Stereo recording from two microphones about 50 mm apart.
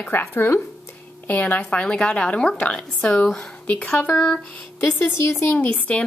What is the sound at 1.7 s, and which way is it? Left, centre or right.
A woman's voice, left.